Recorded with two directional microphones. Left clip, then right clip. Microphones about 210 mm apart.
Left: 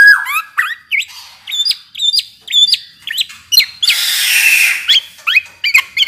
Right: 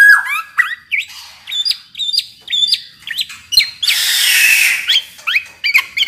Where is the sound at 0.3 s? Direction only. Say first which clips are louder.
Even; 20° left (ahead or behind).